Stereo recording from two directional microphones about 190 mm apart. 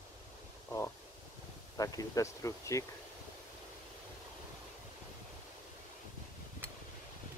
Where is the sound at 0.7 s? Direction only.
15° left (ahead or behind).